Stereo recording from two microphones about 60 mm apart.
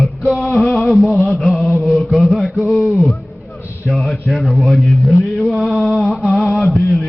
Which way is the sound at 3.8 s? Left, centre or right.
Centre.